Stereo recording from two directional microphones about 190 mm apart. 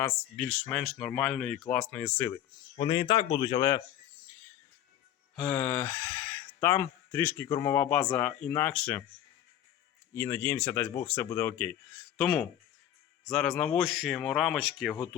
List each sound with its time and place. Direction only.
0.0 s speech: 5° left (ahead or behind)
2.3 s speech: 30° left (ahead or behind)
5.4 s speech: 10° left (ahead or behind)
10.2 s speech: 15° left (ahead or behind); by 14.9 s 5° right (ahead or behind)